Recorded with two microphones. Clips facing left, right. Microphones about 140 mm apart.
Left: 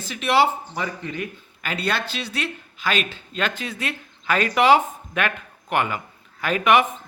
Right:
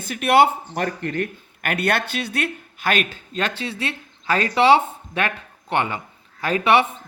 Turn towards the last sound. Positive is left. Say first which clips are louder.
# right 1 dB
turn(degrees=-30)  # may be behind; listen again after turning